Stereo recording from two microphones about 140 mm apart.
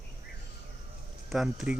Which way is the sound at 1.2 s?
5° right (ahead or behind).